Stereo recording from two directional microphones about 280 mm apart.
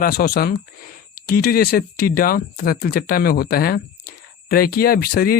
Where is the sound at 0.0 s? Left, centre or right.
Left.